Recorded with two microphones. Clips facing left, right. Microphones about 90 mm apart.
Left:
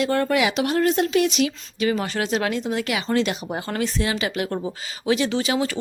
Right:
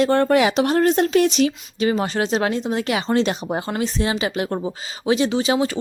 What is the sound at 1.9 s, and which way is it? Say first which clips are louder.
Speech: right 3 dB; 25° right (ahead or behind).